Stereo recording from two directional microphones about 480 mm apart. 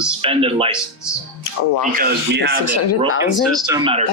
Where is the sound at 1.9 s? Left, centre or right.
Centre.